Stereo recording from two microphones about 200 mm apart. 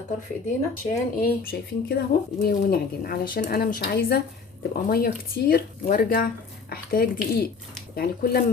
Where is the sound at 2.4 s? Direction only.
50° left (ahead or behind).